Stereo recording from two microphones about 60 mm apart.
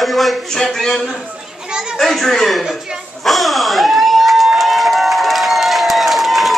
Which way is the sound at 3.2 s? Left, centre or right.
Centre.